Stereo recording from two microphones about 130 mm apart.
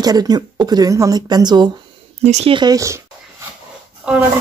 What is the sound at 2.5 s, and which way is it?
Speech, 30° right (ahead or behind).